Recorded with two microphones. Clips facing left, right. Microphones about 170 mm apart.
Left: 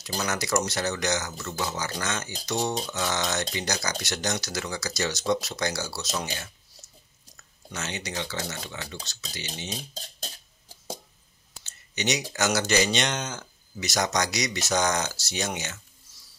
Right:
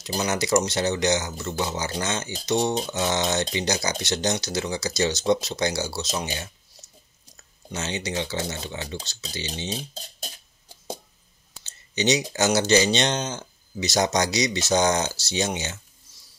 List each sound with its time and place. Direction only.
0.0 s speech: 25° right (ahead or behind)
11.5 s speech: 25° right (ahead or behind)